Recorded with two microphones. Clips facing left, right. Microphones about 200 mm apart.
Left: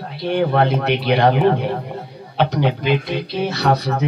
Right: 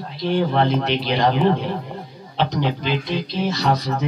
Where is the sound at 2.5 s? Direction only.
60° left (ahead or behind).